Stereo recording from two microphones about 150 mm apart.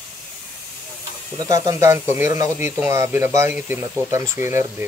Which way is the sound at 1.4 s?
20° right (ahead or behind).